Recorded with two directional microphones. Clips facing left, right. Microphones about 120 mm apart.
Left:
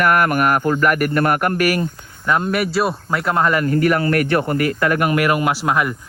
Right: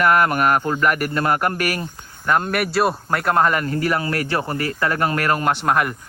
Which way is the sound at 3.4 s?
40° right (ahead or behind).